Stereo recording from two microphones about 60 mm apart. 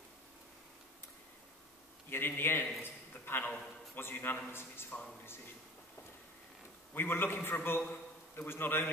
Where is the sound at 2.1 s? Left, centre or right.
Left.